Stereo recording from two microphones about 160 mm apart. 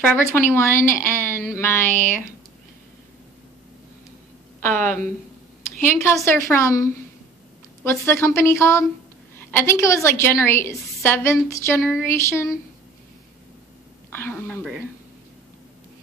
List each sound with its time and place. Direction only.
0.0 s a woman's voice: 15° left (ahead or behind)
5.9 s a woman's voice: 15° left (ahead or behind)
14.1 s a woman's voice: 10° left (ahead or behind)